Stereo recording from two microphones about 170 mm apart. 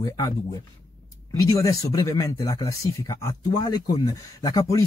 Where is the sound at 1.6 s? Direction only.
20° left (ahead or behind).